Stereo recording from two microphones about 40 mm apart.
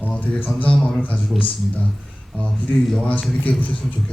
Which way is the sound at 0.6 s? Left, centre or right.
Left.